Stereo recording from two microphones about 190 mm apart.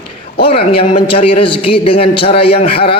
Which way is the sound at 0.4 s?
30° left (ahead or behind).